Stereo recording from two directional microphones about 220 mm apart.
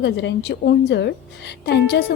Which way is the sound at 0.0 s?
55° left (ahead or behind).